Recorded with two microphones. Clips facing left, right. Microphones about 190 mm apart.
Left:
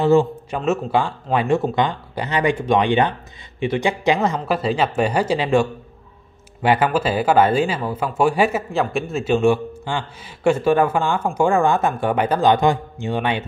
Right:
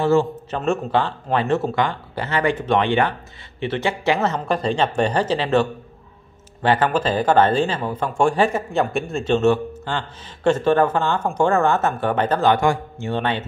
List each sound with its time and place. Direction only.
0.0 s a man's voice: 15° left (ahead or behind)